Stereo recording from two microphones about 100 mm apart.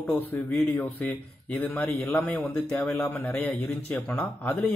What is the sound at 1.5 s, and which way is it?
A man's voice, 15° left (ahead or behind).